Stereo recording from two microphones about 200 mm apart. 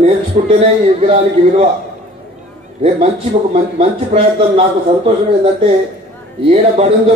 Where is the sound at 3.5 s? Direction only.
30° right (ahead or behind).